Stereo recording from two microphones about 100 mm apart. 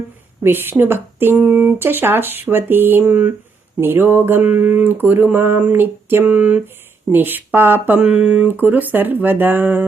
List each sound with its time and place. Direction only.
0.4 s speech: 20° right (ahead or behind)